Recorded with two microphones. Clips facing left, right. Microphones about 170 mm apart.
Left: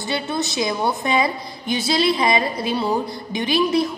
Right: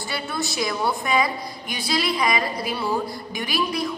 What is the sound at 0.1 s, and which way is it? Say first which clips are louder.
A woman's voice: left 5 dB; 20° left (ahead or behind).